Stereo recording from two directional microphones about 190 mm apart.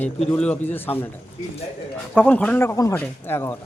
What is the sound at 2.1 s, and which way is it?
Speech, 10° left (ahead or behind).